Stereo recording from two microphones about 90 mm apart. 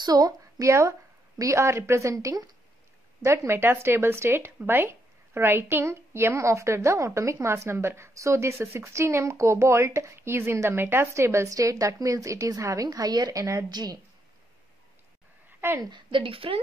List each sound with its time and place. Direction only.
0.0 s a woman's voice: 45° right (ahead or behind)
3.3 s a woman's voice: 25° right (ahead or behind)
13.7 s a woman's voice: 50° right (ahead or behind)
15.6 s a woman's voice: 25° right (ahead or behind)
16.1 s a woman's voice: 80° right